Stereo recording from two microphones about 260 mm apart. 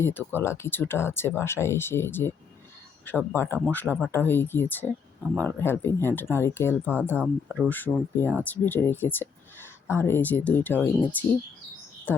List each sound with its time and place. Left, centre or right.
0.0 s speech: centre
7.1 s speech: centre